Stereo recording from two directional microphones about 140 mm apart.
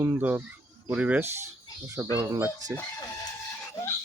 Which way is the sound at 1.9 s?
25° right (ahead or behind).